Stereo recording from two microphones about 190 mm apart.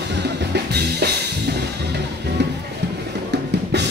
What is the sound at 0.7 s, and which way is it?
Music, 60° right (ahead or behind).